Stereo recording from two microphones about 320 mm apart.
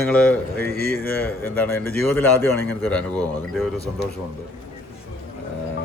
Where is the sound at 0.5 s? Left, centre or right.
Right.